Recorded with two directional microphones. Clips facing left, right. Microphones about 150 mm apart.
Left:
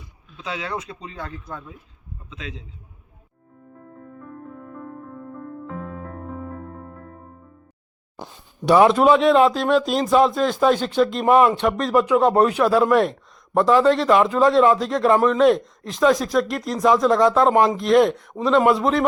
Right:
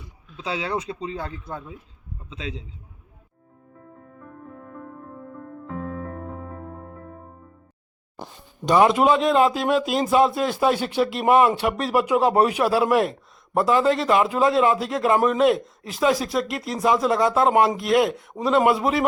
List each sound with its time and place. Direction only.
0.3 s speech: 30° right (ahead or behind)
8.6 s a man's voice: centre (ahead or behind)